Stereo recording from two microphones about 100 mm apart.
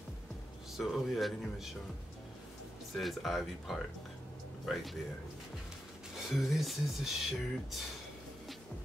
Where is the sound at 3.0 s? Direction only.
Centre (ahead or behind).